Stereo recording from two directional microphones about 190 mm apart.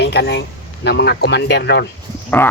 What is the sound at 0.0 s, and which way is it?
Speech, 60° left (ahead or behind).